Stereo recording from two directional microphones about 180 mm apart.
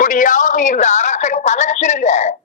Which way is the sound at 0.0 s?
45° left (ahead or behind).